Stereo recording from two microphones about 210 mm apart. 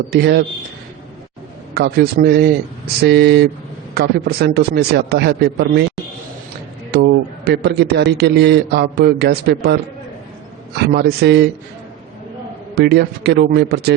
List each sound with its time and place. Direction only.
0.1 s a man's voice: 50° right (ahead or behind)
1.7 s a man's voice: 50° right (ahead or behind)
6.9 s a man's voice: 50° right (ahead or behind)
10.8 s a man's voice: 50° right (ahead or behind)
12.7 s a man's voice: 50° right (ahead or behind)